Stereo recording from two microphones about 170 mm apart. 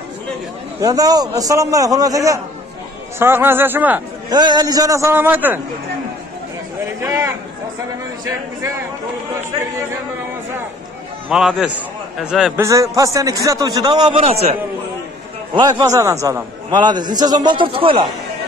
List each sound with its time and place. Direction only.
0.7 s a man's voice: 20° right (ahead or behind)
4.3 s a man's voice: 25° right (ahead or behind)
7.0 s a man's voice: 20° right (ahead or behind)
11.2 s a man's voice: 5° right (ahead or behind)
12.6 s a man's voice: 20° right (ahead or behind); by 14.6 s 35° right (ahead or behind)
15.5 s a man's voice: 20° right (ahead or behind)